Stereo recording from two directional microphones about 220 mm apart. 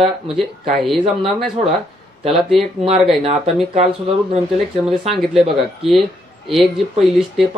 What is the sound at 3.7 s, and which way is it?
Speech, 25° right (ahead or behind).